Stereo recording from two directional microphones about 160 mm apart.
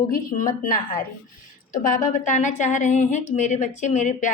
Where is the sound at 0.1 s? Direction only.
60° left (ahead or behind).